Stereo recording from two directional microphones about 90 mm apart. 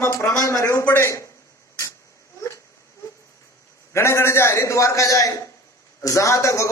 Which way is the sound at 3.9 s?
30° left (ahead or behind).